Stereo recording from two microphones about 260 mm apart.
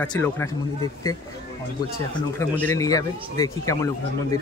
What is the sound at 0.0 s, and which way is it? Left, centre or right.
Speech, centre.